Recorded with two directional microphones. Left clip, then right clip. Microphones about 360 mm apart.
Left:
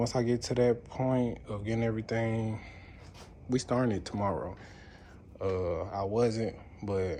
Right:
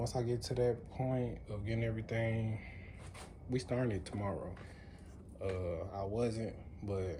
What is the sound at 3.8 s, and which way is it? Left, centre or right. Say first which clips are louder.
Speech: left 8 dB; left.